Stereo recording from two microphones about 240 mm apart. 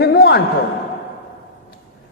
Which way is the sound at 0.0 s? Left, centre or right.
Left.